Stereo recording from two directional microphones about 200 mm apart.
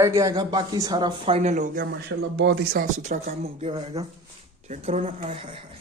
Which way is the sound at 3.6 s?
30° right (ahead or behind).